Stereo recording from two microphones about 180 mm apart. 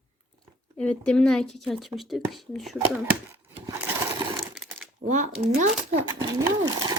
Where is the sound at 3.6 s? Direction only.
20° right (ahead or behind).